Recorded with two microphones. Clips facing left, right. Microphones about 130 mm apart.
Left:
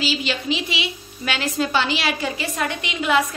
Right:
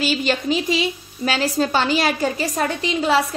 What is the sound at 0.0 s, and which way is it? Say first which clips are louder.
Speech: right 4 dB; 50° right (ahead or behind).